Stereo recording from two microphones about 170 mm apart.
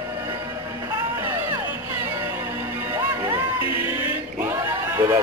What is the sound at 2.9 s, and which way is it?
Music, 15° right (ahead or behind).